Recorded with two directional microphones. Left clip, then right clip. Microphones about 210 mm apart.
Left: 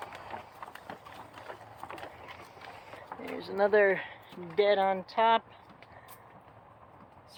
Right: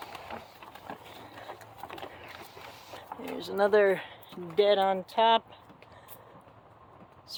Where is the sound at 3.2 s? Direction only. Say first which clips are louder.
Right 1 dB; 15° right (ahead or behind).